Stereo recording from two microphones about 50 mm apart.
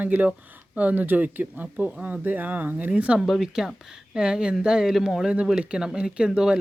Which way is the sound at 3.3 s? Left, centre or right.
Centre.